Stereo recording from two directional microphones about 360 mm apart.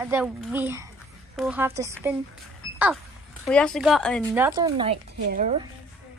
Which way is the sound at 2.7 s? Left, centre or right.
Centre.